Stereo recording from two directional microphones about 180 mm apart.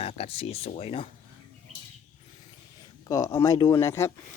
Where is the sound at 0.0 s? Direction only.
30° left (ahead or behind).